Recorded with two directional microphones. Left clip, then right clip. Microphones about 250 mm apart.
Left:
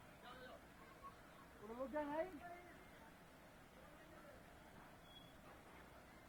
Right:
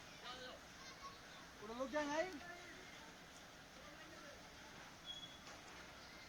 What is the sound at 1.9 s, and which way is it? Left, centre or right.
Speech, right.